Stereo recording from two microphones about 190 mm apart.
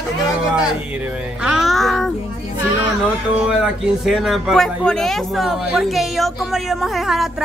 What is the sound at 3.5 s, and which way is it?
Speech, 5° right (ahead or behind).